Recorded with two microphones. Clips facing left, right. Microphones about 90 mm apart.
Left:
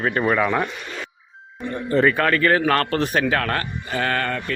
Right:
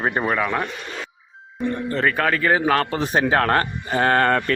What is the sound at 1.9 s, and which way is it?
Speech, 5° left (ahead or behind).